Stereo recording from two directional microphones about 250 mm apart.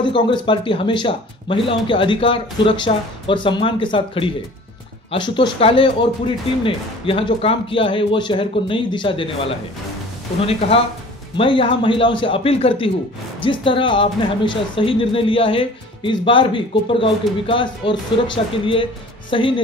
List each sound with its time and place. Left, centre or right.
0.0 s speech: centre
11.3 s speech: left